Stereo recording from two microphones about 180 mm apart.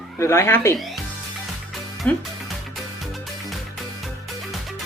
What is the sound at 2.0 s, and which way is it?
Speech, 10° left (ahead or behind).